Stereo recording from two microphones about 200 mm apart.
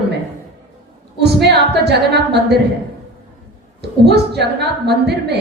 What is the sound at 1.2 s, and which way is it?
A woman's voice, 55° right (ahead or behind).